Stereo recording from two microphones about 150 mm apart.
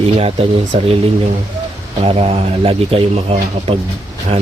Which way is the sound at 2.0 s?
40° right (ahead or behind).